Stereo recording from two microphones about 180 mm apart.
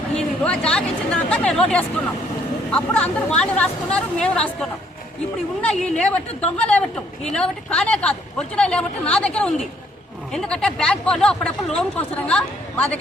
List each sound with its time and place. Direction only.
0.2 s speech: 5° left (ahead or behind)
5.6 s speech: 5° left (ahead or behind)